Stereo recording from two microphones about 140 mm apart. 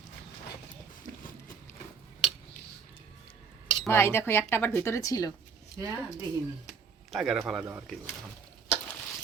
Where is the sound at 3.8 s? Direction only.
20° left (ahead or behind).